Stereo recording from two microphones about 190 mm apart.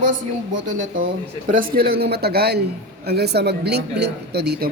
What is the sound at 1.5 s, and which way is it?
Speech, 55° right (ahead or behind).